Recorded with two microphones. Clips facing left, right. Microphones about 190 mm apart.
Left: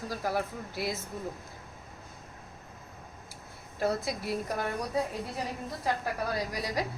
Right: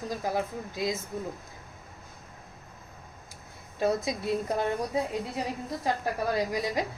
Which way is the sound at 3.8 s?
20° right (ahead or behind).